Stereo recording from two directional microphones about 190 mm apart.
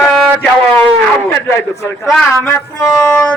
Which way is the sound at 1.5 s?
15° left (ahead or behind).